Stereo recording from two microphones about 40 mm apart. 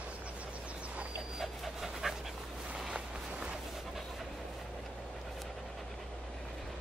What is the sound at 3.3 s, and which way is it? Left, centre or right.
Dog, right.